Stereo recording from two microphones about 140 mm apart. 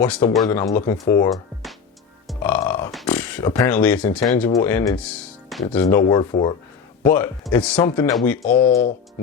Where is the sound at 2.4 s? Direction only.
15° left (ahead or behind).